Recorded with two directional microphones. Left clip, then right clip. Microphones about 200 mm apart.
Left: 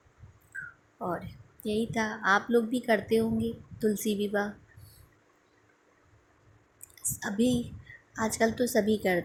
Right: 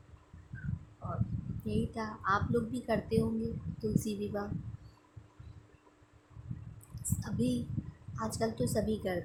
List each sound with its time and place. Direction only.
1.0 s a sound: 20° left (ahead or behind)
1.6 s a woman's voice: 15° left (ahead or behind)
6.9 s a woman's voice: 20° left (ahead or behind)